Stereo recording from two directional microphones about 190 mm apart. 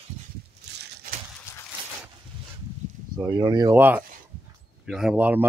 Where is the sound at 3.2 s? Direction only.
20° right (ahead or behind).